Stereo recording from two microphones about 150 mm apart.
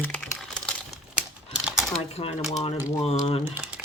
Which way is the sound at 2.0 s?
45° left (ahead or behind).